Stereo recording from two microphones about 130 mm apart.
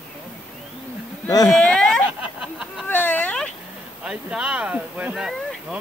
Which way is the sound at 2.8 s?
15° left (ahead or behind).